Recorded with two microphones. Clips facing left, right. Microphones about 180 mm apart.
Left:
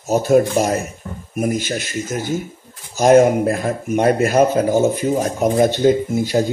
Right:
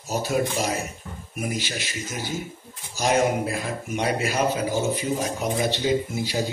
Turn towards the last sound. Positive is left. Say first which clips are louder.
# left 8 dB
turn(degrees=50)  # may be behind; listen again after turning